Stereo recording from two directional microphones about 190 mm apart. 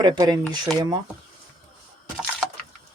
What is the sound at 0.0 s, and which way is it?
Speech, 20° right (ahead or behind).